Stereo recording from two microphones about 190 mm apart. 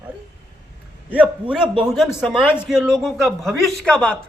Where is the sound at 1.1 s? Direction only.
5° right (ahead or behind).